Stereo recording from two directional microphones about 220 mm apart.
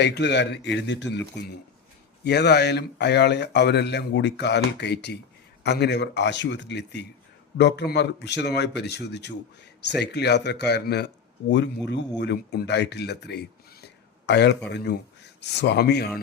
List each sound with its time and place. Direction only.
0.0 s speech: 50° left (ahead or behind)
13.8 s a sound: 50° left (ahead or behind)
14.7 s speech: 50° left (ahead or behind)